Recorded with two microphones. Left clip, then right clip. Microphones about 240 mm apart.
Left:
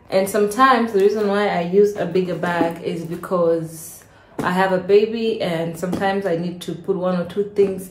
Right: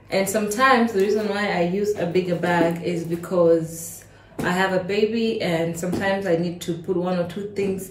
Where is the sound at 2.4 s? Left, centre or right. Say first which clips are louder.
Even; left.